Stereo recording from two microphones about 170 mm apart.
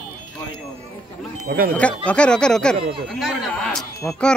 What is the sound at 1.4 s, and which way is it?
Speech, 55° right (ahead or behind).